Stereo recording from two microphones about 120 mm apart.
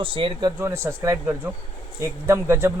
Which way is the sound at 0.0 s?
45° right (ahead or behind).